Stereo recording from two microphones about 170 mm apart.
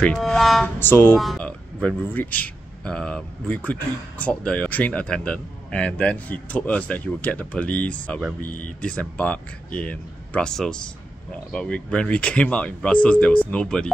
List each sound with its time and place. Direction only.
0.0 s speech: 5° left (ahead or behind)
0.7 s a man's voice: 10° left (ahead or behind)
8.5 s speech: 50° left (ahead or behind)
8.8 s a man's voice: 10° left (ahead or behind)